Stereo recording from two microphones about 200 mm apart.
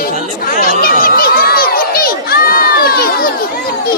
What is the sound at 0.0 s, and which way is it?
Crowd, 45° left (ahead or behind).